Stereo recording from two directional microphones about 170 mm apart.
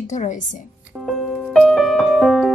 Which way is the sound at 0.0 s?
45° left (ahead or behind).